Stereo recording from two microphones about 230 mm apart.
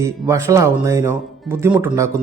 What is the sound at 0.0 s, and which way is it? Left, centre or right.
A man's voice, centre.